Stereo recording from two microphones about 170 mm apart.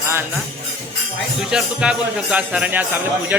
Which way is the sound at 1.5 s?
5° right (ahead or behind).